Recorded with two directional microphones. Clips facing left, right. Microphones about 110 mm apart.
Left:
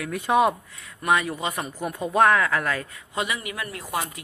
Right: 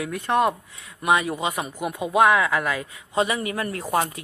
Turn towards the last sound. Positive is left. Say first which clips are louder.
# right 6 dB
turn(degrees=-45)  # may be behind; listen again after turning